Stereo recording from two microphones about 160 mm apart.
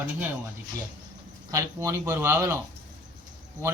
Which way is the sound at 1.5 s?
15° right (ahead or behind).